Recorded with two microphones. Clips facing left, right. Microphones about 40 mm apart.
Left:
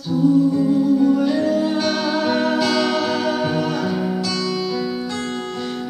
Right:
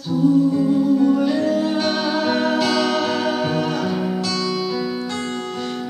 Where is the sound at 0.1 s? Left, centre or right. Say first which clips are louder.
Even; centre.